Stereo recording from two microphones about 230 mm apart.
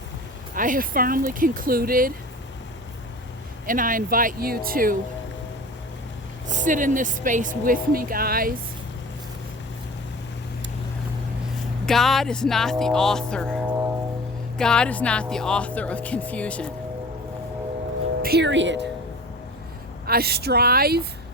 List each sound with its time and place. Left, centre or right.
0.5 s a woman's voice: right
3.7 s a woman's voice: right
6.5 s a woman's voice: right
11.9 s speech: centre
13.7 s music: centre
14.6 s speech: centre
18.2 s speech: right
20.1 s speech: right